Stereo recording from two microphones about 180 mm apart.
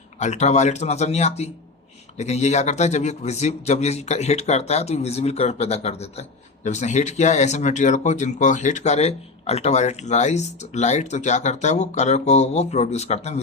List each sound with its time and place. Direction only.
0.2 s speech: 40° left (ahead or behind)